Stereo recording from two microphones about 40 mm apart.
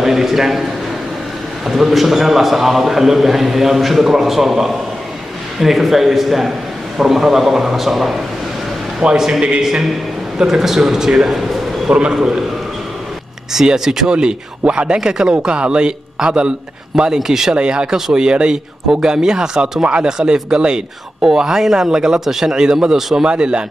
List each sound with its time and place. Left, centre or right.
0.0 s speech: centre
1.7 s a man's voice: centre
9.0 s a man's voice: centre
13.7 s speech: centre
14.1 s a man's voice: right
17.6 s a man's voice: right
20.1 s a man's voice: centre